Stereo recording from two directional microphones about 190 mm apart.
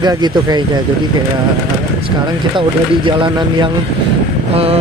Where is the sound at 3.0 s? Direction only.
25° right (ahead or behind).